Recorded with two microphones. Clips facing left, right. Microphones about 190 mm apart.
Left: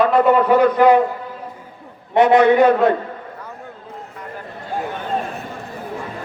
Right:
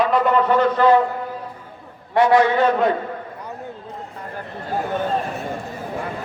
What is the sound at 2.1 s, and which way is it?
Speech, 20° left (ahead or behind).